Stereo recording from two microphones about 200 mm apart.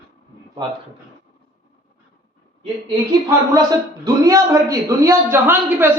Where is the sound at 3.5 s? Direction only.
20° right (ahead or behind).